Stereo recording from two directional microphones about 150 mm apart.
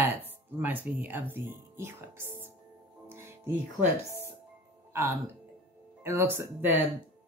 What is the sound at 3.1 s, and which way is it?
Music, 15° right (ahead or behind).